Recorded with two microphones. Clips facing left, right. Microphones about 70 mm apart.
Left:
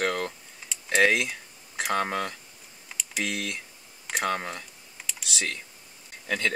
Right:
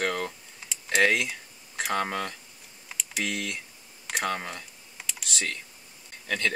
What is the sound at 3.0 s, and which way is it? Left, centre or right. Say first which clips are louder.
Speech: even; centre.